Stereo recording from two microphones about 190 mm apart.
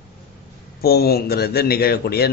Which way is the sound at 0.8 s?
55° left (ahead or behind).